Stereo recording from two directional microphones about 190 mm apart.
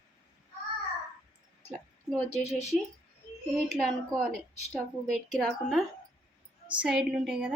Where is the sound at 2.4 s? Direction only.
35° left (ahead or behind).